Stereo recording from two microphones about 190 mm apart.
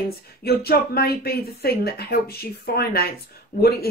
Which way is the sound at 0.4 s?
55° left (ahead or behind).